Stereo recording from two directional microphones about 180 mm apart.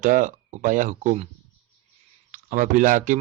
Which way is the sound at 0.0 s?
45° right (ahead or behind).